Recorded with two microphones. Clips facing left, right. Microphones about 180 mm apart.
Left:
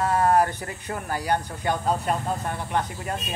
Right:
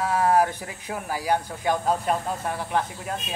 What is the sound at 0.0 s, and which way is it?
Speech, 5° right (ahead or behind).